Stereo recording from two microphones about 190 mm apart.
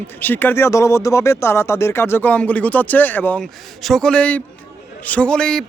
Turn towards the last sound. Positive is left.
turn(degrees=5)  # may be behind; listen again after turning